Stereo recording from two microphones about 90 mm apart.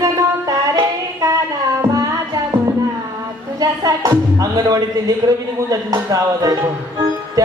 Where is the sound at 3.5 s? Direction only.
45° right (ahead or behind).